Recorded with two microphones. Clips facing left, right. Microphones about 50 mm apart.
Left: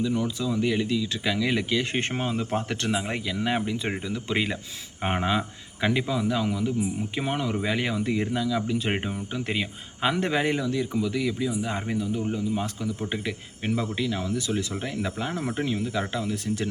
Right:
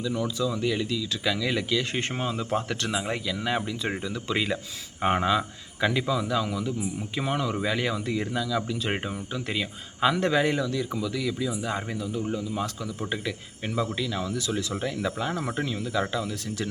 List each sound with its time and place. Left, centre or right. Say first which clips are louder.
0.0 s speech: left 1 dB; left